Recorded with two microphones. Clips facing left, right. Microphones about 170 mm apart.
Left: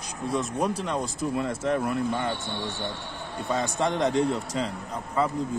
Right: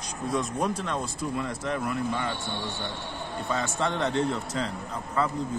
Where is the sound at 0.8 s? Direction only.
15° left (ahead or behind).